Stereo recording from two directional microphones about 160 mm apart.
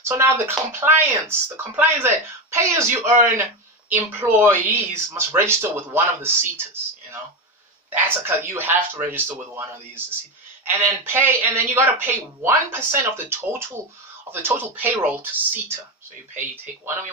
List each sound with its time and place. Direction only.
0.0 s speech: 15° right (ahead or behind)
7.9 s speech: 15° right (ahead or behind)